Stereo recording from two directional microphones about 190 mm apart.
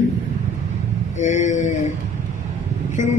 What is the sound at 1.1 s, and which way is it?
Speech, 40° left (ahead or behind).